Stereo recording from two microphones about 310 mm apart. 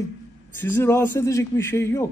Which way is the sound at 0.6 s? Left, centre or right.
Centre.